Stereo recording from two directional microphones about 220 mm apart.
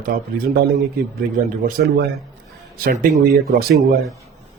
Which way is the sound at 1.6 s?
40° right (ahead or behind).